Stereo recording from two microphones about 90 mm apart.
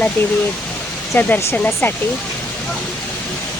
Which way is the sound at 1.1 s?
25° left (ahead or behind).